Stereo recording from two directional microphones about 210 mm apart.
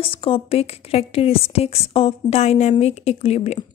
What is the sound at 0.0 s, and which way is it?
A woman's voice, 25° left (ahead or behind).